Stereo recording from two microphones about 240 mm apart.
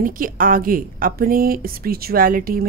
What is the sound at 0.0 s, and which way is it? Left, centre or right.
A woman's voice, right.